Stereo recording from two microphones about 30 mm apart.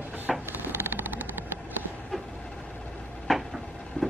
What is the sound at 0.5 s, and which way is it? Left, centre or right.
Vehicle, right.